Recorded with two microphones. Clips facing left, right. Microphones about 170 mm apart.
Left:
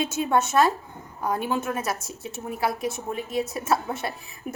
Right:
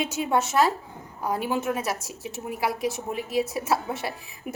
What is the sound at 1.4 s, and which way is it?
Speech, 15° right (ahead or behind).